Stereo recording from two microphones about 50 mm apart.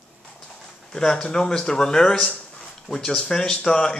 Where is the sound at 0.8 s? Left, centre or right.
Centre.